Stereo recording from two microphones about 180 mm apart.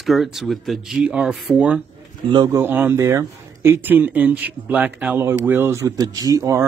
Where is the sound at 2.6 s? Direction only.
10° right (ahead or behind).